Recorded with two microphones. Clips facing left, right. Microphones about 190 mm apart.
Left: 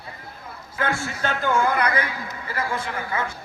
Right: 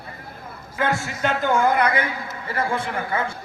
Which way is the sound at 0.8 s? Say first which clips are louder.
Right 2 dB; 20° right (ahead or behind).